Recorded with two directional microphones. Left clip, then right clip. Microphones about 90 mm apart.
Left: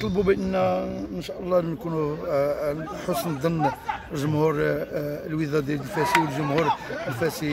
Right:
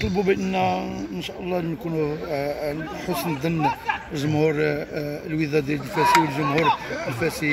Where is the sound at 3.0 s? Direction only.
45° left (ahead or behind).